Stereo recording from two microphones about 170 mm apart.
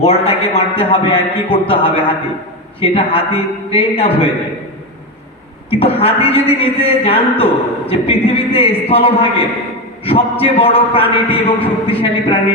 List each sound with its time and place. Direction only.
0.0 s a man's voice: 35° left (ahead or behind)
5.7 s a man's voice: 35° left (ahead or behind)